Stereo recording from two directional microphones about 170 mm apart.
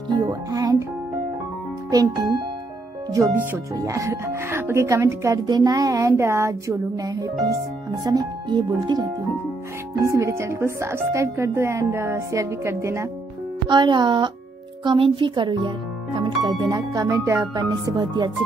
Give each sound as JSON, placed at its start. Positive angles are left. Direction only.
{"t": 0.1, "sound": "music", "side_deg": -25}
{"t": 1.9, "sound": "speech", "side_deg": -20}
{"t": 13.7, "sound": "speech", "side_deg": -25}